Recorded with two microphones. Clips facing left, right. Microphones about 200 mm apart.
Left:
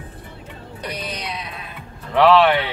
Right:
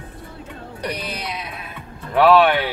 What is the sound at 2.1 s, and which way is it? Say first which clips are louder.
Speech: even; 5° right (ahead or behind).